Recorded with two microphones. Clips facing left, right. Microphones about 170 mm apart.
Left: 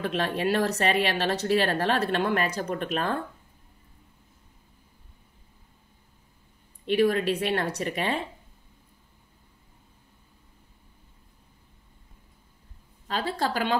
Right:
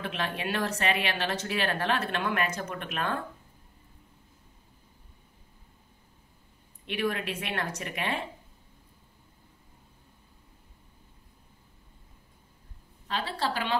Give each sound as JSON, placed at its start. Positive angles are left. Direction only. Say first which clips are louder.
{"t": 0.0, "sound": "speech", "louder": "left 6 dB", "side_deg": 40}
{"t": 6.9, "sound": "speech", "louder": "left 8 dB", "side_deg": 35}
{"t": 13.1, "sound": "a woman's voice", "louder": "left 3 dB", "side_deg": 45}